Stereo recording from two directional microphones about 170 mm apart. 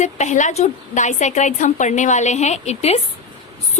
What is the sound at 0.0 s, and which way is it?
A woman's voice, 45° left (ahead or behind).